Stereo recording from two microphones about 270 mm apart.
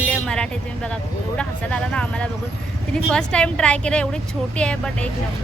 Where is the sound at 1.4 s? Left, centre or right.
Centre.